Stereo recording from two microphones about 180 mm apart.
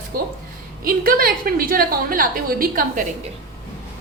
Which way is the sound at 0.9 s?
55° right (ahead or behind).